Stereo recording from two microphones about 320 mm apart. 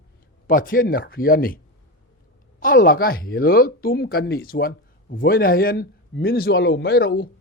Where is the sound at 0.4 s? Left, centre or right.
Left.